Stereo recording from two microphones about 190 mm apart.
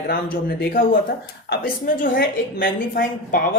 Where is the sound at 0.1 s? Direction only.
50° left (ahead or behind).